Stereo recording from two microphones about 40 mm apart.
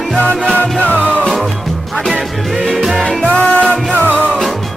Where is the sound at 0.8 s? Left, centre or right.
Left.